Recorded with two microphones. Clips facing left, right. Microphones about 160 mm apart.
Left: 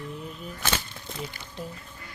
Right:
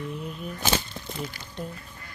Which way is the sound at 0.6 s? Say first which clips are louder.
Right 3 dB; 25° right (ahead or behind).